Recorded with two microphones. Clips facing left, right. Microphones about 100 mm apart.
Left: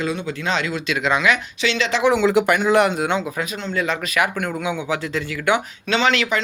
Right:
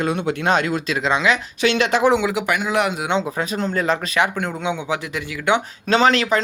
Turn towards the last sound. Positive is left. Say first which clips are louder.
# right 3 dB
turn(degrees=-35)  # may be behind; listen again after turning